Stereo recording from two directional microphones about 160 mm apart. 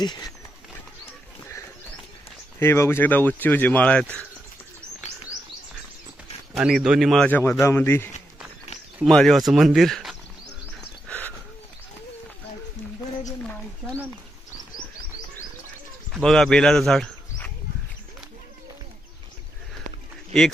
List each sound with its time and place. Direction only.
0.0 s speech: 25° left (ahead or behind)
2.6 s speech: 15° left (ahead or behind)
6.5 s speech: 5° right (ahead or behind); by 8.1 s 15° left (ahead or behind)
9.0 s speech: centre (ahead or behind)
11.1 s a sound: 10° left (ahead or behind)
13.4 s a sound: 10° left (ahead or behind)
16.1 s speech: 5° left (ahead or behind)